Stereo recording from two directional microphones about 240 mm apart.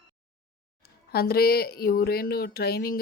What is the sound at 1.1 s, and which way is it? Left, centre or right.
A woman's voice, left.